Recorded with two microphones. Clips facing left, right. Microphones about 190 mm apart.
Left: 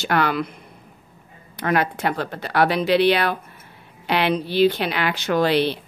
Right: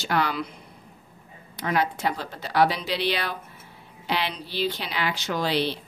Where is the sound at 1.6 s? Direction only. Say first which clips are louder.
Left 4 dB; 60° left (ahead or behind).